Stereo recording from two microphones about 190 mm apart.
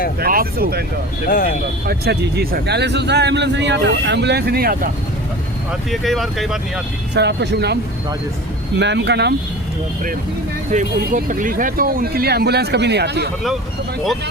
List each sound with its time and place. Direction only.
0.2 s speech: 50° right (ahead or behind)
1.3 s speech: 50° left (ahead or behind)
1.9 s a man's voice: 55° right (ahead or behind)
5.9 s speech: centre (ahead or behind)
7.1 s a man's voice: 65° right (ahead or behind)
8.8 s a man's voice: 65° right (ahead or behind)
10.7 s speech: 40° right (ahead or behind); by 13.3 s 60° right (ahead or behind)